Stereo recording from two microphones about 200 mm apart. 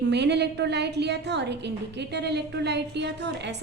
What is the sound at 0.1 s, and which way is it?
A woman's voice, 60° right (ahead or behind).